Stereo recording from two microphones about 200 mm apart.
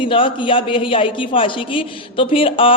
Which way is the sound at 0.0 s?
25° left (ahead or behind).